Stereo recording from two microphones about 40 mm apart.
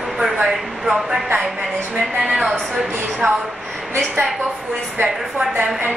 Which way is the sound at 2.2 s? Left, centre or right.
Centre.